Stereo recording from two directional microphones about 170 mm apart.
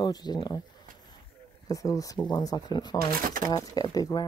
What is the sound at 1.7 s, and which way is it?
Speech, 20° left (ahead or behind).